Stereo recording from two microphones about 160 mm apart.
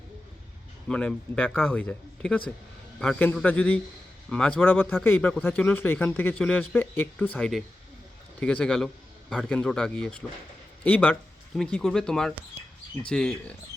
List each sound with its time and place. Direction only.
0.9 s speech: 5° left (ahead or behind)